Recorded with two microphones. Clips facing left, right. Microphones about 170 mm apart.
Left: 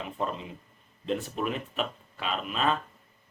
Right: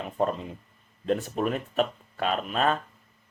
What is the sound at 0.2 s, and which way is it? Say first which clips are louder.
Speech: right 7 dB; 45° right (ahead or behind).